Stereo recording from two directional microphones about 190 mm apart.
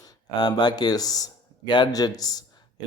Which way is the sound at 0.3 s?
20° left (ahead or behind).